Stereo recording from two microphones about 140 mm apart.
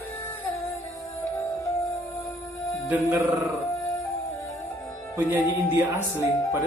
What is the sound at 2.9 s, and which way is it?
Music, 10° right (ahead or behind).